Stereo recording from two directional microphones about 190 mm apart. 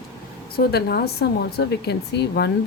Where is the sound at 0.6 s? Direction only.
55° left (ahead or behind).